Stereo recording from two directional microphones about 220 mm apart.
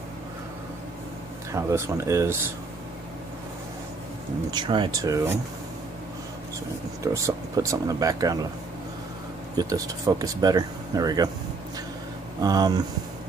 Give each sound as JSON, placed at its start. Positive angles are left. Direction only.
{"t": 1.5, "sound": "speech", "side_deg": -15}
{"t": 4.5, "sound": "speech", "side_deg": -20}
{"t": 7.0, "sound": "speech", "side_deg": -15}
{"t": 9.6, "sound": "speech", "side_deg": -15}
{"t": 12.4, "sound": "speech", "side_deg": -15}